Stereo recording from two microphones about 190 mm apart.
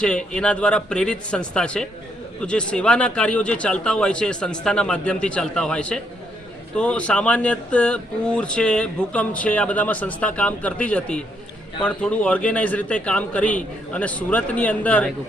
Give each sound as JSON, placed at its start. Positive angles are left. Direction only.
{"t": 0.0, "sound": "speech", "side_deg": 5}